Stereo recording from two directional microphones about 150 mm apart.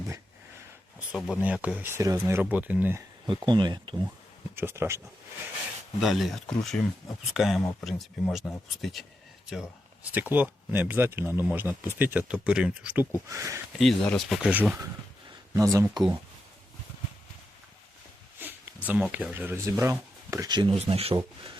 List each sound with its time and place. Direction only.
1.4 s speech: 10° right (ahead or behind)
3.2 s speech: 30° right (ahead or behind)
4.5 s speech: 15° right (ahead or behind)
6.0 s speech: centre (ahead or behind); by 13.6 s 20° right (ahead or behind)
13.7 s speech: 5° left (ahead or behind)
15.5 s speech: 20° right (ahead or behind)
18.3 s a sound: 15° right (ahead or behind)
19.1 s speech: 10° right (ahead or behind); by 20.7 s 30° right (ahead or behind)
20.7 s speech: 40° right (ahead or behind)